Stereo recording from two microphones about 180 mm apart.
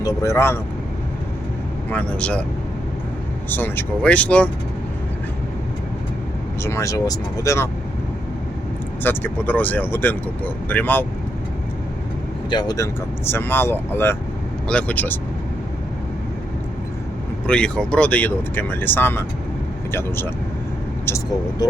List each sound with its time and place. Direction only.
0.0 s speech: 15° left (ahead or behind)
1.9 s speech: 5° left (ahead or behind)
3.5 s speech: 10° left (ahead or behind)
6.6 s speech: 15° left (ahead or behind)
9.0 s speech: 10° left (ahead or behind)
12.5 s speech: 20° left (ahead or behind)
17.4 s speech: 5° left (ahead or behind); by 21.7 s 20° left (ahead or behind)